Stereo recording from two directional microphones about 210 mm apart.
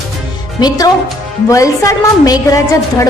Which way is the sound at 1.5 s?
15° left (ahead or behind).